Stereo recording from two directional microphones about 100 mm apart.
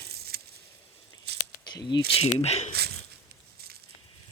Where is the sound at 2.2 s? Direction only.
90° left.